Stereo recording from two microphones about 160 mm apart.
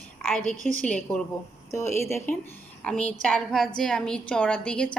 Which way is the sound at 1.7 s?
15° left (ahead or behind).